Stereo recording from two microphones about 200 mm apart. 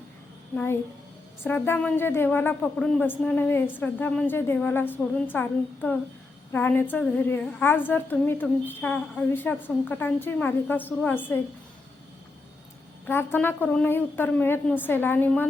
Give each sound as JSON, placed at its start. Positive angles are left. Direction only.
{"t": 0.5, "sound": "a woman's voice", "side_deg": 10}
{"t": 13.1, "sound": "a woman's voice", "side_deg": 10}